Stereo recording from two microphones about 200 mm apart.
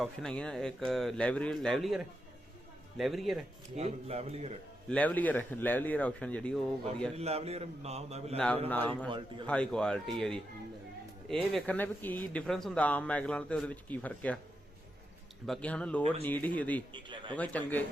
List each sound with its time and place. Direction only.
0.0 s speech: 5° left (ahead or behind)
3.0 s speech: centre (ahead or behind)
3.8 s speech: 30° right (ahead or behind)
4.9 s speech: 5° left (ahead or behind)
7.2 s speech: 30° right (ahead or behind)
8.4 s speech: 5° left (ahead or behind)
11.5 s speech: 5° left (ahead or behind)
15.4 s speech: 5° left (ahead or behind)
16.9 s a man's voice: 25° right (ahead or behind)
17.3 s speech: 5° left (ahead or behind)